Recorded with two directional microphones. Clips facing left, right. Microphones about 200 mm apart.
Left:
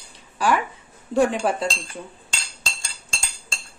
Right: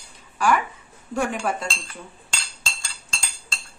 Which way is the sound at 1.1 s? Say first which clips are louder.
Left 5 dB; 30° left (ahead or behind).